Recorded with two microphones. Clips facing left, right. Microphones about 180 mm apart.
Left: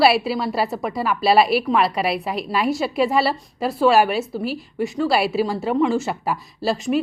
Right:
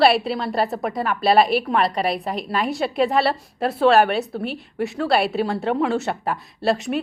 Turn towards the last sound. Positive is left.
turn(degrees=0)  # may be behind; listen again after turning